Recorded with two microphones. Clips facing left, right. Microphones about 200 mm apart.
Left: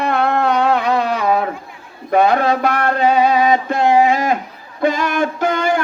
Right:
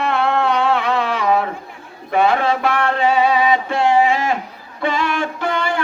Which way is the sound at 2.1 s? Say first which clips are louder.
Left 2 dB; 40° left (ahead or behind).